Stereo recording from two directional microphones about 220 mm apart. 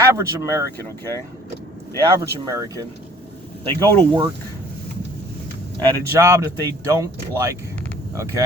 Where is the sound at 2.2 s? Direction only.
15° right (ahead or behind).